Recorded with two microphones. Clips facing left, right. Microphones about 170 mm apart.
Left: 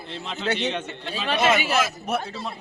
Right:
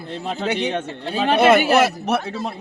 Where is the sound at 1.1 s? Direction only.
55° right (ahead or behind); by 2.3 s 75° right (ahead or behind).